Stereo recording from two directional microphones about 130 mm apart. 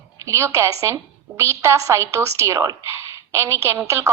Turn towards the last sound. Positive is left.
turn(degrees=-20)  # may be behind; listen again after turning